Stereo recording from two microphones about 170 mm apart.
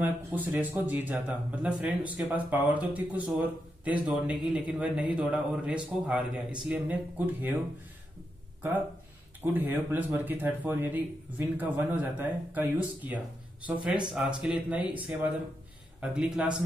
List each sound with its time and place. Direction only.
0.0 s speech: 10° right (ahead or behind)
9.4 s speech: 10° right (ahead or behind)
16.0 s speech: 5° right (ahead or behind)